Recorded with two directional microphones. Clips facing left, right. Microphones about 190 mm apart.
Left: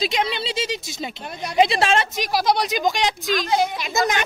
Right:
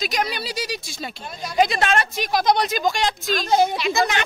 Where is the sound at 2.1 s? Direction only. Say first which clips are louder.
Right 1 dB; 10° left (ahead or behind).